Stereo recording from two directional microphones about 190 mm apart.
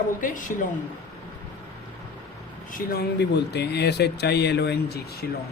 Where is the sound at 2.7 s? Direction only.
50° left (ahead or behind).